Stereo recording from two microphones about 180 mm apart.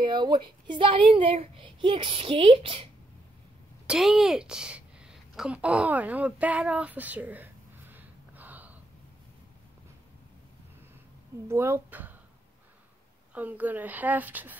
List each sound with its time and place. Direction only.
0.0 s speech: 25° right (ahead or behind)
3.8 s a woman's voice: 5° right (ahead or behind)
7.9 s gasp: 10° right (ahead or behind)
11.4 s a woman's voice: 15° right (ahead or behind)
13.3 s a woman's voice: 10° right (ahead or behind)